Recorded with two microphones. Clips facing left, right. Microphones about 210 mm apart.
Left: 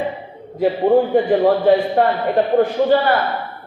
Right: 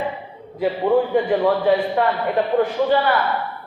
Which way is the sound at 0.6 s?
40° left (ahead or behind).